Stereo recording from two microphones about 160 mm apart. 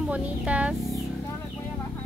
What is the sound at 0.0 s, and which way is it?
Speech, 10° right (ahead or behind).